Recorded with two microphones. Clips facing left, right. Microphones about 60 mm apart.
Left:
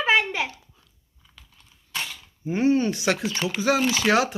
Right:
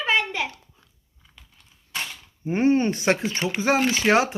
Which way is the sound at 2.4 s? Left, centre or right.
Right.